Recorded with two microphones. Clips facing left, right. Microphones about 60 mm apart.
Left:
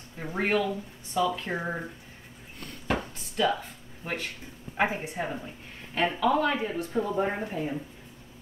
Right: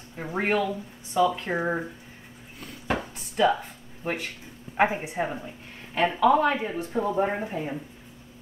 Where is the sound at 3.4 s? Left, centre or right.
Centre.